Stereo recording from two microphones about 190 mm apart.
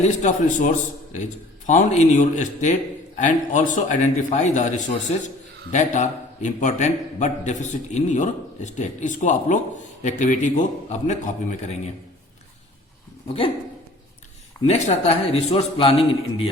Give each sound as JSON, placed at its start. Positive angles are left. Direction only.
{"t": 0.0, "sound": "a man's voice", "side_deg": 40}
{"t": 13.2, "sound": "speech", "side_deg": 30}
{"t": 14.7, "sound": "a man's voice", "side_deg": 35}